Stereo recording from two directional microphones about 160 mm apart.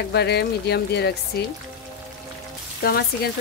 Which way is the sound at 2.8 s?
75° left (ahead or behind).